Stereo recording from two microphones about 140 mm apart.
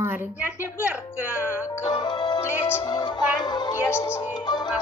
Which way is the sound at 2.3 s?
15° left (ahead or behind).